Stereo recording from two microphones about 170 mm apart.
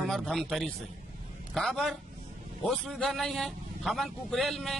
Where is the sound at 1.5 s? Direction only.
Centre (ahead or behind).